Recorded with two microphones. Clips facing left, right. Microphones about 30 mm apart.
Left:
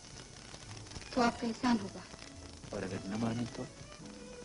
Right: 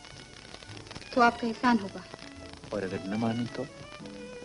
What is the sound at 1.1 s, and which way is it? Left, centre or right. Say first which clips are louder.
Speech: right 8 dB; right.